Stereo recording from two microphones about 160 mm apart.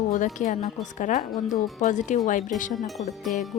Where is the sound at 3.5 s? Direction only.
45° left (ahead or behind).